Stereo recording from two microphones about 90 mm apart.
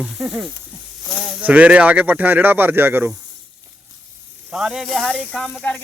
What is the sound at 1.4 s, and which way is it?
Speech, 15° right (ahead or behind).